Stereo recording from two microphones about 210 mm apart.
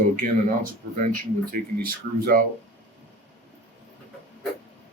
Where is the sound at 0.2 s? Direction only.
40° right (ahead or behind).